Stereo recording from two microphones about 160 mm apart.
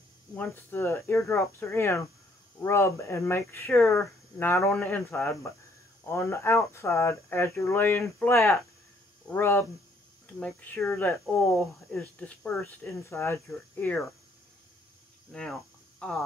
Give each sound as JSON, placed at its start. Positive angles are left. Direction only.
{"t": 0.4, "sound": "speech", "side_deg": 15}
{"t": 15.3, "sound": "speech", "side_deg": 5}